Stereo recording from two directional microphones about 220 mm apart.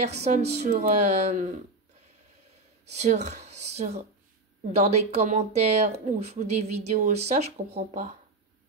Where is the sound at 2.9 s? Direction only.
30° right (ahead or behind).